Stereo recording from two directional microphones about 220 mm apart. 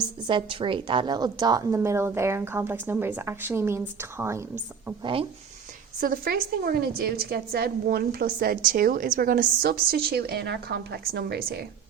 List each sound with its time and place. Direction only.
0.3 s a woman's voice: 20° right (ahead or behind)
6.0 s a woman's voice: 40° right (ahead or behind)